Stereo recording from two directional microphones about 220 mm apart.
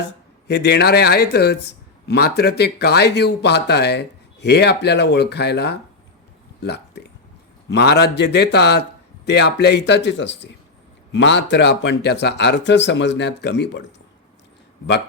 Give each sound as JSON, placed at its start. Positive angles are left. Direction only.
{"t": 0.4, "sound": "speech", "side_deg": 50}
{"t": 6.6, "sound": "a sound", "side_deg": 50}
{"t": 7.7, "sound": "speech", "side_deg": 50}